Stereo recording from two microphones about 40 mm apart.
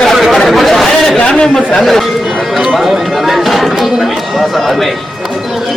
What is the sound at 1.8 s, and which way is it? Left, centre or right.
Speech, centre.